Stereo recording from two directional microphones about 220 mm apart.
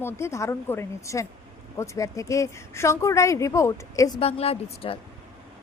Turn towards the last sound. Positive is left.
turn(degrees=25)  # may be behind; listen again after turning